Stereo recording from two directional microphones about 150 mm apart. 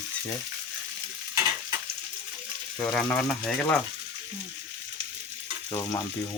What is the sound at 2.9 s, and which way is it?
Speech, 10° left (ahead or behind).